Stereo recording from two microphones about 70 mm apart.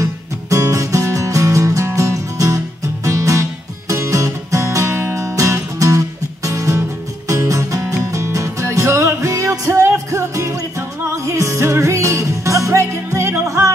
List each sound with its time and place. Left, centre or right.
0.0 s music: right